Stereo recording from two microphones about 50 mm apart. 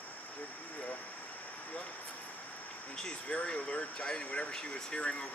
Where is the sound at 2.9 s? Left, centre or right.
Centre.